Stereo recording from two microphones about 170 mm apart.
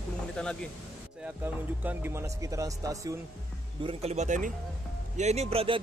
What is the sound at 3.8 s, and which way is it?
Speech, 35° right (ahead or behind).